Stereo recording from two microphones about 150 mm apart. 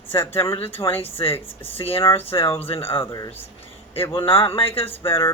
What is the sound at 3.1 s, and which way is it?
Speech, 25° left (ahead or behind).